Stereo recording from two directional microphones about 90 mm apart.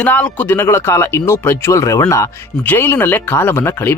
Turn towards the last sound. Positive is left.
turn(degrees=25)  # may be behind; listen again after turning